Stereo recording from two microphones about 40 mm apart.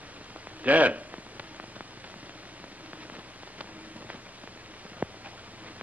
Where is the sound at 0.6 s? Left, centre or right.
Right.